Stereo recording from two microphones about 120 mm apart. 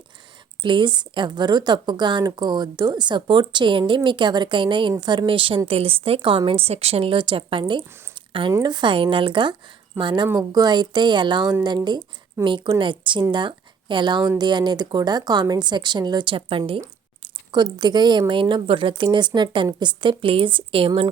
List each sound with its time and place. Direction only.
0.6 s a woman's voice: 40° right (ahead or behind)
17.2 s a woman's voice: 35° right (ahead or behind)